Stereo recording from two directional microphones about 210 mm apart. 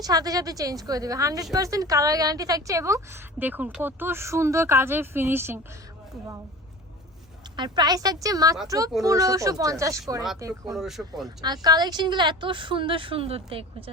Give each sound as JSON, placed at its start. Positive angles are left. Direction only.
{"t": 0.0, "sound": "a woman's voice", "side_deg": -15}
{"t": 7.5, "sound": "a woman's voice", "side_deg": -20}
{"t": 10.8, "sound": "speech", "side_deg": 0}
{"t": 11.4, "sound": "a woman's voice", "side_deg": -20}